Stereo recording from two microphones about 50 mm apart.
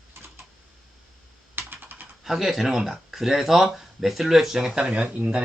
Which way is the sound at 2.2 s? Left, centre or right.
Centre.